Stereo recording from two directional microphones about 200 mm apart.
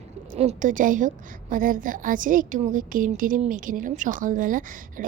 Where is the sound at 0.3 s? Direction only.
35° right (ahead or behind).